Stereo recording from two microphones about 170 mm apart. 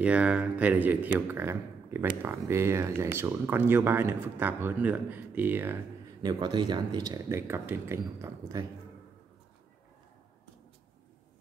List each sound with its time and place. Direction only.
0.0 s speech: 5° right (ahead or behind)
6.2 s speech: 25° right (ahead or behind)